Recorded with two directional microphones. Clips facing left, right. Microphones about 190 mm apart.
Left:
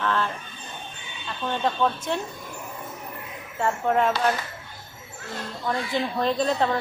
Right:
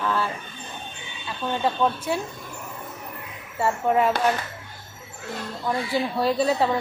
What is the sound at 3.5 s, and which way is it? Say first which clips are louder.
Speech: right 1 dB; 5° right (ahead or behind).